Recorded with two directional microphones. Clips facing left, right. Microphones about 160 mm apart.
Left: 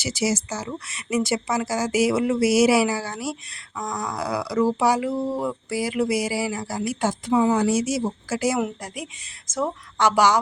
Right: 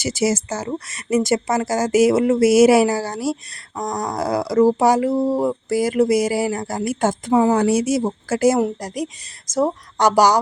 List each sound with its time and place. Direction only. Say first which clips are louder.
0.0 s speech: right 4 dB; 50° right (ahead or behind)